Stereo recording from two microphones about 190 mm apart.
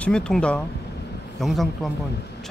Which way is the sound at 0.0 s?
5° left (ahead or behind).